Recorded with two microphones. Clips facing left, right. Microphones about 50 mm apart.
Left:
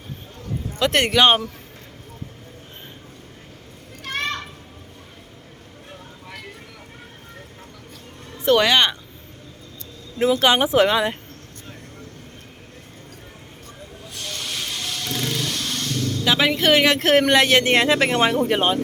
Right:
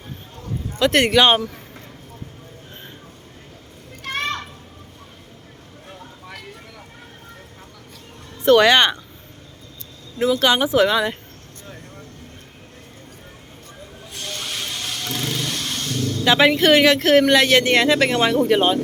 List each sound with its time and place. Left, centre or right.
0.8 s speech: centre
4.1 s children playing: centre
8.4 s speech: centre
10.2 s speech: left
14.2 s vehicle: centre
16.3 s speech: centre
16.8 s speech: left